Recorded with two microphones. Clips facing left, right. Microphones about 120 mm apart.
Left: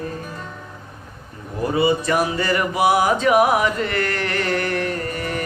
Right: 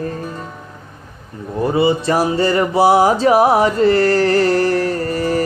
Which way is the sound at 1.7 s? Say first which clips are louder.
Right 3 dB; 30° right (ahead or behind).